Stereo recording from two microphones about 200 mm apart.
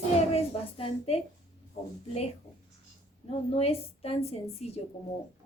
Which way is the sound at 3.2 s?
30° left (ahead or behind).